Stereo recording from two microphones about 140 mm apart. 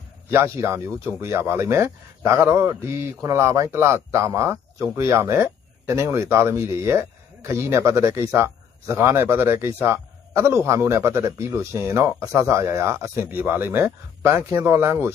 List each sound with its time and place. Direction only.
0.3 s speech: 20° right (ahead or behind)